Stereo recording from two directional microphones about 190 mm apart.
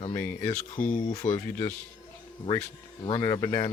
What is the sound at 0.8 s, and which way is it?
Speech, 45° left (ahead or behind).